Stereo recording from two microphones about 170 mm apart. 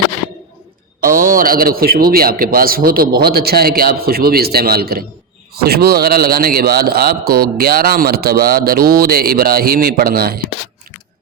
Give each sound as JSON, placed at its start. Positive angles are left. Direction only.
{"t": 1.0, "sound": "speech", "side_deg": -55}